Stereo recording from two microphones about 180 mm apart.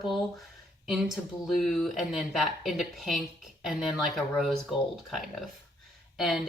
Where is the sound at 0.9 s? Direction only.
Centre (ahead or behind).